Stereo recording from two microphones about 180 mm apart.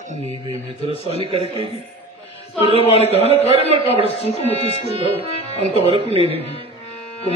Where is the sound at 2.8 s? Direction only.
35° left (ahead or behind).